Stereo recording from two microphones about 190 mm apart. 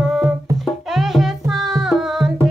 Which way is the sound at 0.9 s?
Centre (ahead or behind).